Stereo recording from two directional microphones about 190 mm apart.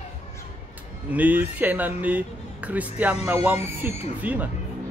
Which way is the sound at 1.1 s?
10° right (ahead or behind).